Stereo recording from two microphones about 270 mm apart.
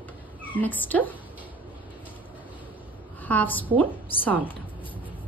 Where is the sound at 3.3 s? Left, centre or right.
Centre.